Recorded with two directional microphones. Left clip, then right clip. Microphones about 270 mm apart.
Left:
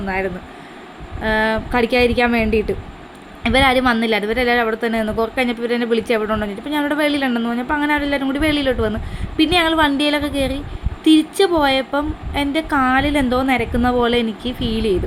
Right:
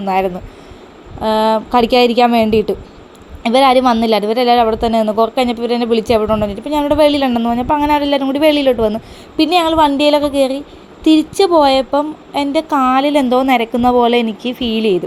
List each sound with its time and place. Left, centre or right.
0.0 s a woman's voice: right
3.5 s a woman's voice: centre